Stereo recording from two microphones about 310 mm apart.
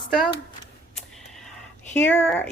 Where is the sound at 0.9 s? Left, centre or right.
Centre.